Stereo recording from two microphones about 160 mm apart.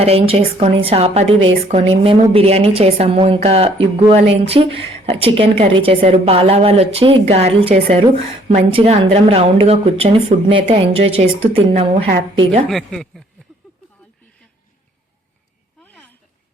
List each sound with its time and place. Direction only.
0.0 s speech: 35° right (ahead or behind)
12.6 s speech: centre (ahead or behind)
15.8 s a sound: 10° left (ahead or behind)